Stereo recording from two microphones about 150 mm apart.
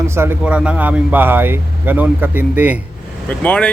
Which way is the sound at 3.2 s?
10° left (ahead or behind).